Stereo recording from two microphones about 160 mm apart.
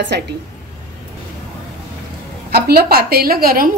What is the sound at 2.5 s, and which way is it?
A woman's voice, 75° right (ahead or behind).